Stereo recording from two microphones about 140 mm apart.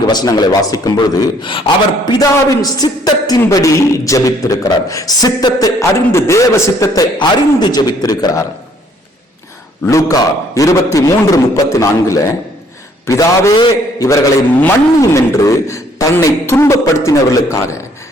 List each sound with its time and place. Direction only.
0.1 s a man's voice: 30° left (ahead or behind)
9.8 s a man's voice: 25° left (ahead or behind)